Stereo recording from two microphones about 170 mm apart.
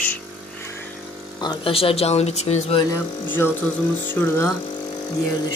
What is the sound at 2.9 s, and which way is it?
Speech, 15° left (ahead or behind).